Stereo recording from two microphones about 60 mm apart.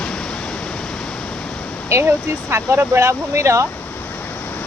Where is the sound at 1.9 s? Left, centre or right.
Right.